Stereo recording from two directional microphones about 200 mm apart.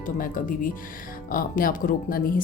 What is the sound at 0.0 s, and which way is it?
Speech, 45° left (ahead or behind).